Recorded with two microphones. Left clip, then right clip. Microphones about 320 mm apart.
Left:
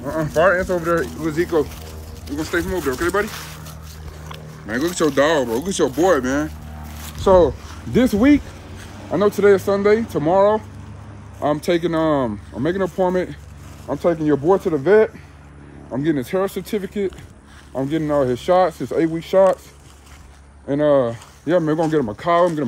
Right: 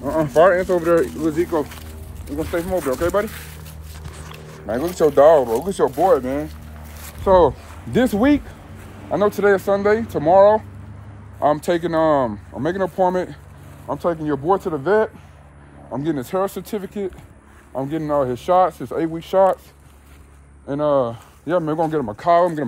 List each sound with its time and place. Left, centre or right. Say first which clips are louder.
0.0 s speech: right 3 dB; centre
1.3 s speech: left 2 dB; centre
4.6 s speech: right 2 dB; centre
9.7 s speech: left 1 dB; centre
20.6 s speech: left 2 dB; centre